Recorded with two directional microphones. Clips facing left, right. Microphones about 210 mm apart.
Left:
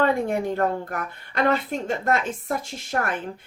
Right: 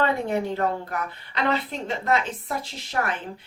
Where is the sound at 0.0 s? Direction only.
50° left (ahead or behind).